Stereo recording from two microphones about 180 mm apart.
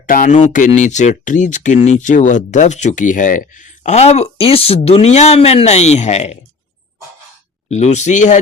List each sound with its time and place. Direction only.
0.0 s speech: 45° left (ahead or behind)
7.7 s speech: 40° left (ahead or behind)